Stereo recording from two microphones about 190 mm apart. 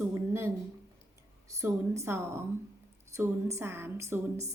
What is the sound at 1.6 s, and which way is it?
Speech, 15° right (ahead or behind).